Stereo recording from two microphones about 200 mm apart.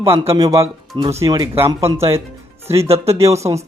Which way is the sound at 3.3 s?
15° right (ahead or behind).